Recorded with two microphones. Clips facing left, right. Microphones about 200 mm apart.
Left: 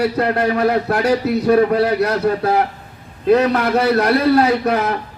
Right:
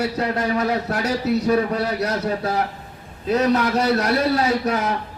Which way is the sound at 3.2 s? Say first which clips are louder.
Left 4 dB; 60° left (ahead or behind).